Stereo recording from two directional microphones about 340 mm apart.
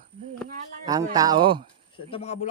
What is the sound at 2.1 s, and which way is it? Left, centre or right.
Speech, centre.